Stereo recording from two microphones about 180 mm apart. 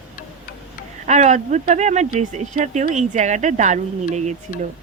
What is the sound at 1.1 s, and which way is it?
Speech, 40° right (ahead or behind).